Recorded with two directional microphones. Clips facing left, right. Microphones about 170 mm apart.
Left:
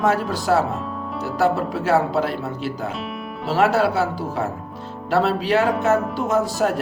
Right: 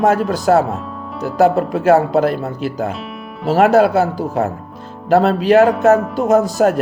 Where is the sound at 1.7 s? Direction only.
45° right (ahead or behind).